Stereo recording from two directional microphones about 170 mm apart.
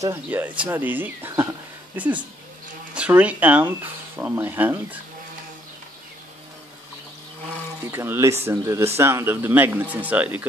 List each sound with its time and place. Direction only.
0.0 s speech: 15° right (ahead or behind)
2.9 s speech: 10° right (ahead or behind)
7.9 s speech: 15° right (ahead or behind)